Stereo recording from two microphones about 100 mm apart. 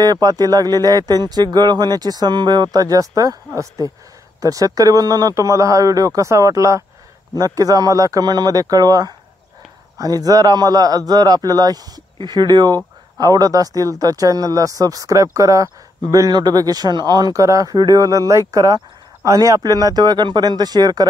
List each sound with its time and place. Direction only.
0.0 s speech: 40° right (ahead or behind)
4.4 s speech: 35° right (ahead or behind)